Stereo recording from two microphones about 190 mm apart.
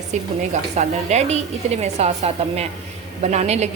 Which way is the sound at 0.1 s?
40° right (ahead or behind).